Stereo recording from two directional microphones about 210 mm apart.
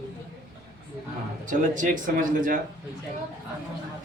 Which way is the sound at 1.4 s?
35° right (ahead or behind).